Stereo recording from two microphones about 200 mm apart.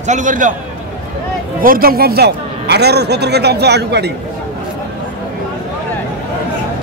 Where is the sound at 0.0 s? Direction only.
40° right (ahead or behind).